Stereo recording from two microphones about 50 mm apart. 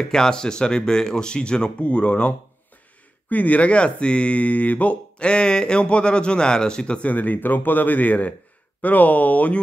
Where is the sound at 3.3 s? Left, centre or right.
Left.